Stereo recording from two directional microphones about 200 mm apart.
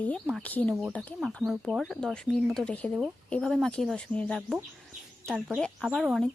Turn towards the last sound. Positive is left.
turn(degrees=0)  # may be behind; listen again after turning